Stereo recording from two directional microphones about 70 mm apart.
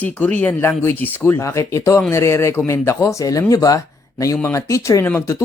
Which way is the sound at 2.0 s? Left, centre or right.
Left.